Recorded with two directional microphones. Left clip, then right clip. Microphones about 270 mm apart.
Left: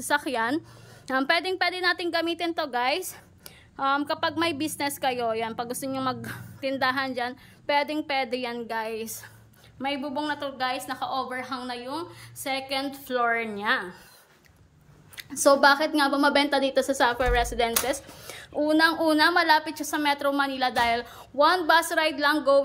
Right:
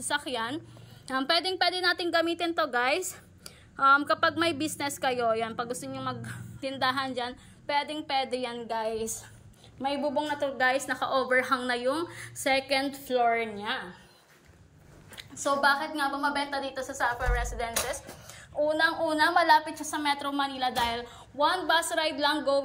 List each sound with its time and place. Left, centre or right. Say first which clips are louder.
0.0 s a woman's voice: left 5 dB; centre
15.6 s a woman's voice: left 6 dB; left